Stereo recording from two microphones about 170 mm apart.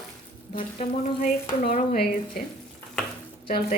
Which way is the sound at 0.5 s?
50° left (ahead or behind).